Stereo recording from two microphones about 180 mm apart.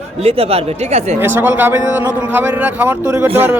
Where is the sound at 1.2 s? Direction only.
10° right (ahead or behind).